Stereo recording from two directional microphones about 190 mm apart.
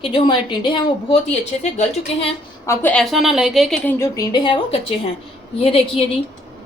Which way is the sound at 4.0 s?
20° left (ahead or behind).